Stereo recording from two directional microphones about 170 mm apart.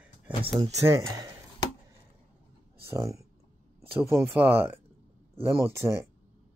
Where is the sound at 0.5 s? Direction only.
35° right (ahead or behind).